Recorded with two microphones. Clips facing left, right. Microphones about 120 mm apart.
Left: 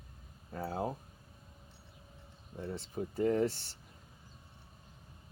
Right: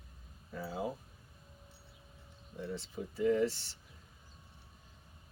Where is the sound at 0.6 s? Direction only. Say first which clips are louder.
Left 2 dB; 50° left (ahead or behind).